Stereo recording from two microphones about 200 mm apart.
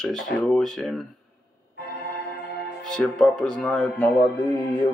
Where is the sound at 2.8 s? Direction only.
Centre (ahead or behind).